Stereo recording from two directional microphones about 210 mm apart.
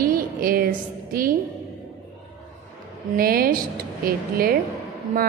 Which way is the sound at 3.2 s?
45° right (ahead or behind).